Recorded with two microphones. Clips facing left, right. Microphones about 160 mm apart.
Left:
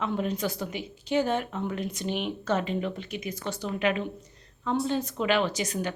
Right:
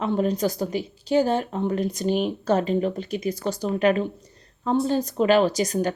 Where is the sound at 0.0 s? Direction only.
35° right (ahead or behind).